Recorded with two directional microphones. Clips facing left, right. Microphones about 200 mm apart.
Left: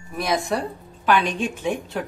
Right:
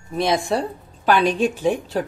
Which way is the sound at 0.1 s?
25° right (ahead or behind).